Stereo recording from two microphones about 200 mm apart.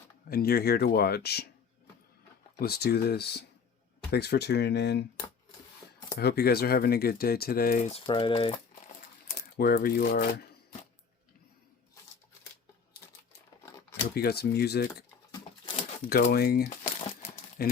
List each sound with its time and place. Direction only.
0.3 s speech: 50° left (ahead or behind)
2.6 s speech: 50° left (ahead or behind)
6.1 s speech: 50° left (ahead or behind); by 8.5 s 25° left (ahead or behind)
9.6 s speech: 50° left (ahead or behind)
13.3 s tearing: 15° left (ahead or behind)
14.1 s speech: 50° left (ahead or behind)
15.3 s a sound: 25° left (ahead or behind)
16.0 s speech: 50° left (ahead or behind)
16.6 s crumpling: 35° left (ahead or behind)